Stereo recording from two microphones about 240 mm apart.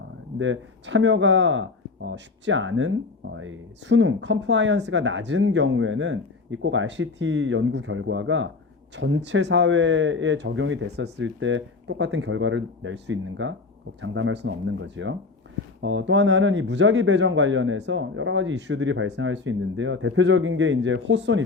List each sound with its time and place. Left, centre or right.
0.3 s speech: right